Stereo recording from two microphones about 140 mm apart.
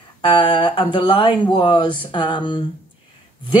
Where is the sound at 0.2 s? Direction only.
35° left (ahead or behind).